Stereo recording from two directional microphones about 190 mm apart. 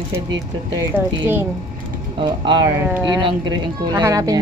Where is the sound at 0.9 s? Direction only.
10° right (ahead or behind).